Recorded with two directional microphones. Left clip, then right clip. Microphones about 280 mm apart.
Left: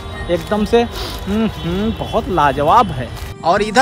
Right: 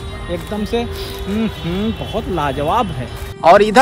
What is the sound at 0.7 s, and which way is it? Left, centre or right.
Speech, centre.